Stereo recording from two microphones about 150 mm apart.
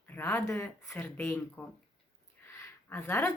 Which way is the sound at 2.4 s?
15° left (ahead or behind).